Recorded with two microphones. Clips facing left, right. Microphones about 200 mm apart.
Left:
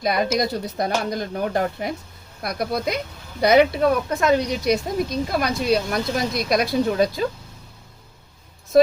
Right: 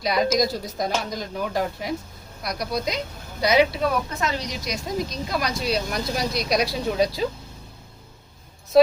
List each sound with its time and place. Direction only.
0.0 s speech: 55° left (ahead or behind)
8.7 s speech: 50° left (ahead or behind)